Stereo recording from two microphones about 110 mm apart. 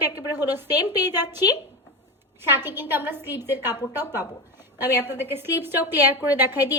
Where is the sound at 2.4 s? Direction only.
20° right (ahead or behind).